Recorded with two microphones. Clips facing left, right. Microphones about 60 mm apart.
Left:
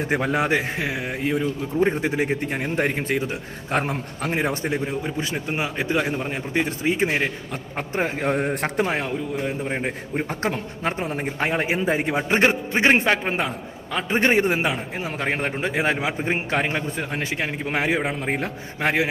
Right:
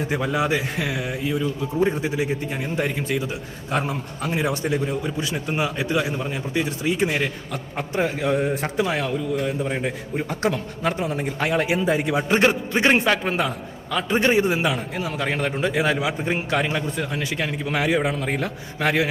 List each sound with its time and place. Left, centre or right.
0.0 s a man's voice: left
0.8 s a man's voice: left
1.1 s a man's voice: left
9.0 s a man's voice: left
14.6 s a man's voice: left